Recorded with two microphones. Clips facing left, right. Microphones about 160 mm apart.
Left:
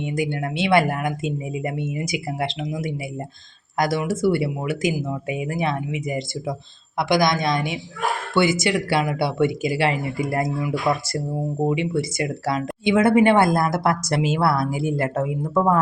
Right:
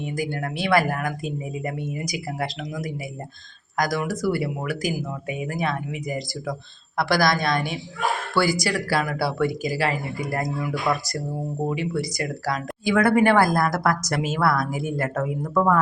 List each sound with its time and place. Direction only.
0.2 s speech: 25° left (ahead or behind)
3.8 s speech: 25° left (ahead or behind)